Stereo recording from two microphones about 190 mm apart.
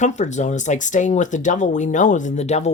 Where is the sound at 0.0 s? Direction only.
40° left (ahead or behind).